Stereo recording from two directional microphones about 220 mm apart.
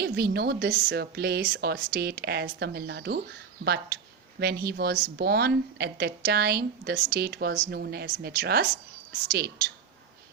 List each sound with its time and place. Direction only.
0.0 s speech: 45° right (ahead or behind)